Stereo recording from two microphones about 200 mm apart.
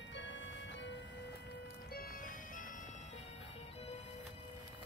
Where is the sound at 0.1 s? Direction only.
65° left (ahead or behind); by 3.9 s 30° left (ahead or behind).